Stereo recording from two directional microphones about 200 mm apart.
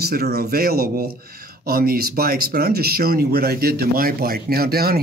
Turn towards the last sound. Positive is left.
turn(degrees=-50)  # may be behind; listen again after turning